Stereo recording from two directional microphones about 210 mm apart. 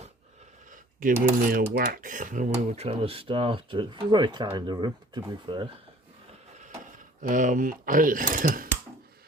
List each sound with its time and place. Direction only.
0.7 s speech: 40° right (ahead or behind); by 5.6 s 20° right (ahead or behind)
7.2 s speech: 40° right (ahead or behind)